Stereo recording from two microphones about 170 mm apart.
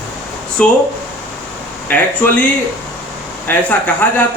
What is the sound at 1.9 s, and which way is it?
Speech, 10° left (ahead or behind).